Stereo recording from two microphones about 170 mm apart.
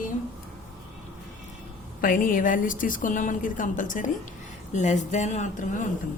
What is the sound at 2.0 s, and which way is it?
Speech, 55° left (ahead or behind).